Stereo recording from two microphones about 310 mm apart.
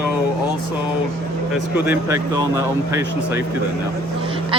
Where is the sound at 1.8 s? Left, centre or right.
Centre.